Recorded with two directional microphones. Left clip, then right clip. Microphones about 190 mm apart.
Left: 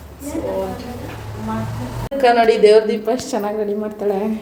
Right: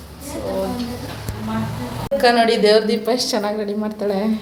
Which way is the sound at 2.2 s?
5° left (ahead or behind).